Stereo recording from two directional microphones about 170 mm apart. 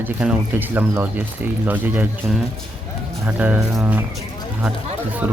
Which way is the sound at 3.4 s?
10° right (ahead or behind).